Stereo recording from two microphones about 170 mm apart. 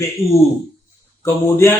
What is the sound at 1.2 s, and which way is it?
Speech, 15° left (ahead or behind).